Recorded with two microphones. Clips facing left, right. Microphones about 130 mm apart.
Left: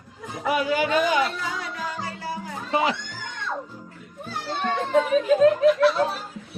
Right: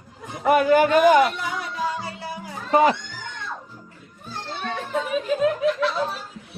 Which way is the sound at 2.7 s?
45° right (ahead or behind).